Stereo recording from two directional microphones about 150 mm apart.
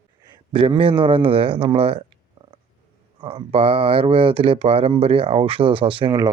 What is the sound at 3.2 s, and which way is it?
Speech, 35° right (ahead or behind).